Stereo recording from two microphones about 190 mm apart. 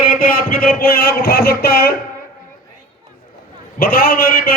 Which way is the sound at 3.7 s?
50° left (ahead or behind).